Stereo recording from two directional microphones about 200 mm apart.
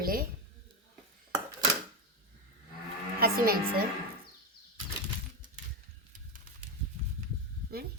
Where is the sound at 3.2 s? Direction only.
50° right (ahead or behind).